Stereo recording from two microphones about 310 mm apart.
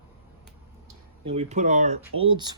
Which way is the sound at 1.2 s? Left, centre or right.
Centre.